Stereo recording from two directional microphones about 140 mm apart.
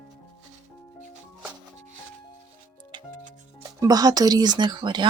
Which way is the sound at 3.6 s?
25° right (ahead or behind).